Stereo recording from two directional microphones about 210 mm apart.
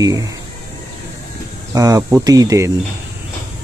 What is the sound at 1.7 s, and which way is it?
Speech, 15° right (ahead or behind).